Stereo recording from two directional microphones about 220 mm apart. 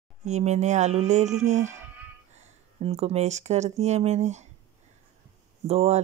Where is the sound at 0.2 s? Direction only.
30° right (ahead or behind).